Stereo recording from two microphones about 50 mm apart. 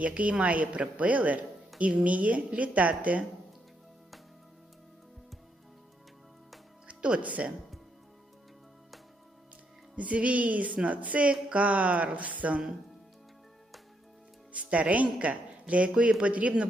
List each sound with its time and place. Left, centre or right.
0.0 s a woman's voice: right
6.8 s speech: right
9.9 s a woman's voice: right
14.5 s a woman's voice: right